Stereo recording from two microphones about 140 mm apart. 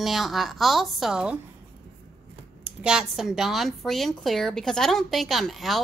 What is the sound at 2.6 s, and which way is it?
A woman's voice, 5° right (ahead or behind).